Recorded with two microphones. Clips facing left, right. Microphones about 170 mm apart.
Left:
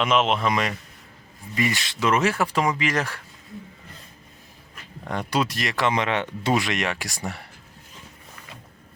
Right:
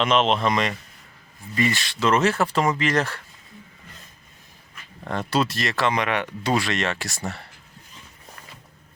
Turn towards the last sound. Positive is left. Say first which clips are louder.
# right 1 dB
turn(degrees=15)  # may be behind; listen again after turning